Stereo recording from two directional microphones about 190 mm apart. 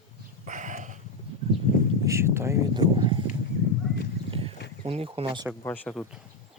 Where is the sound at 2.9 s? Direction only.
25° right (ahead or behind).